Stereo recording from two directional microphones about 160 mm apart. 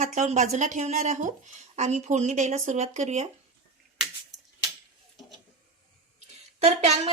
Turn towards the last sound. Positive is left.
turn(degrees=-40)  # may be behind; listen again after turning